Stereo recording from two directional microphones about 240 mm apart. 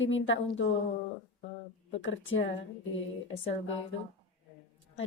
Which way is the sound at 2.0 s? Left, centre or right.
Left.